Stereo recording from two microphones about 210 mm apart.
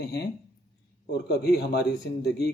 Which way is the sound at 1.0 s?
50° left (ahead or behind).